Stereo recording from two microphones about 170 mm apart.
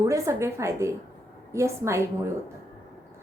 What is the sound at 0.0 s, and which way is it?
A woman's voice, 15° right (ahead or behind).